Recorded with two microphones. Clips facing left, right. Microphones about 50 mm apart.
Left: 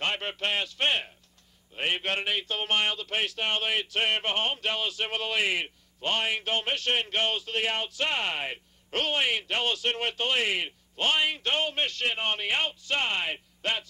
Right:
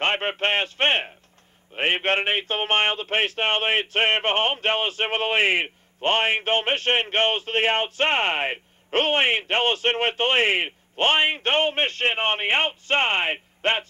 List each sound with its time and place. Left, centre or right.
0.0 s a man's voice: right